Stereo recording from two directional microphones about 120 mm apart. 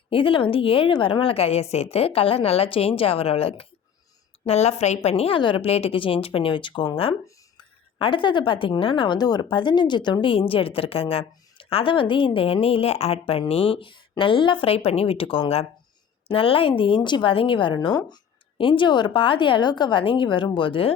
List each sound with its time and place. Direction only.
0.1 s a woman's voice: 45° left (ahead or behind); by 4.9 s 65° left (ahead or behind)
5.0 s a woman's voice: 55° left (ahead or behind)